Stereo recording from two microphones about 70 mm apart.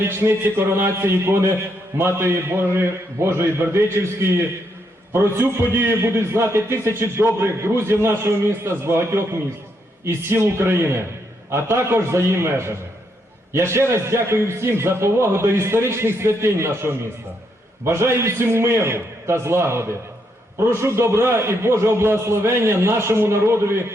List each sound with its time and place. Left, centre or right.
0.0 s a man's voice: right